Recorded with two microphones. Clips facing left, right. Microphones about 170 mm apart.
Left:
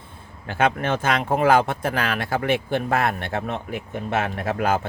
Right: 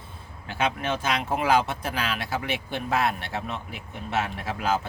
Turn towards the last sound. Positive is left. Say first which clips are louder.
# left 4 dB
turn(degrees=55)  # may be behind; listen again after turning